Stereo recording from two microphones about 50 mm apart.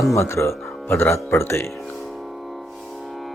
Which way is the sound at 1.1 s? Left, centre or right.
Left.